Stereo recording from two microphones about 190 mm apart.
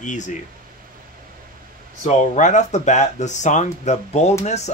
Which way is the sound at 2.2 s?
40° left (ahead or behind).